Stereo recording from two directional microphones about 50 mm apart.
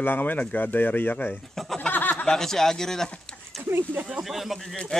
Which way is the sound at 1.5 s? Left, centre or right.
Centre.